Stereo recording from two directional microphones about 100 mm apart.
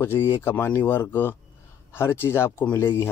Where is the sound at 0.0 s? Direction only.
25° left (ahead or behind).